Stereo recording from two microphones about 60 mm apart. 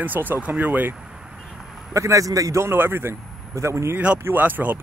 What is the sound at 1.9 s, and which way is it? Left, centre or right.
Speech, right.